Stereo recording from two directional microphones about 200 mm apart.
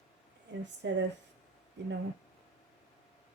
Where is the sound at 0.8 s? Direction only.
60° right (ahead or behind).